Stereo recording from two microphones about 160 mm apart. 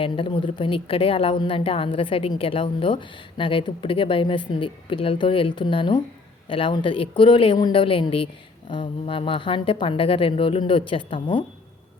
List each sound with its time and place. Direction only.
0.0 s a woman's voice: 35° left (ahead or behind)